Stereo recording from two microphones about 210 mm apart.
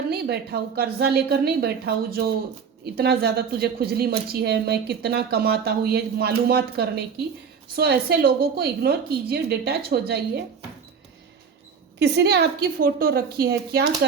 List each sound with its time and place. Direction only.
0.1 s a woman's voice: 50° right (ahead or behind)
11.9 s a woman's voice: 50° right (ahead or behind)